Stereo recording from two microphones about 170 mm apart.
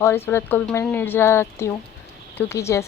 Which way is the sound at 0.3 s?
10° left (ahead or behind).